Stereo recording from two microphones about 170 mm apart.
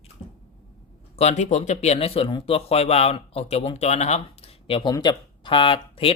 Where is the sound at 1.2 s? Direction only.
40° left (ahead or behind).